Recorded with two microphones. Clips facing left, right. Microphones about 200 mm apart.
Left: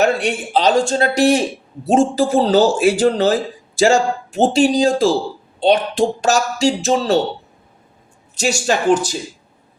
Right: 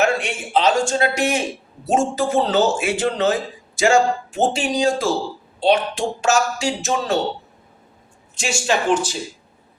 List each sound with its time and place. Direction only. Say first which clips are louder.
0.0 s speech: left 4 dB; 35° left (ahead or behind)
8.4 s speech: left 3 dB; 40° left (ahead or behind)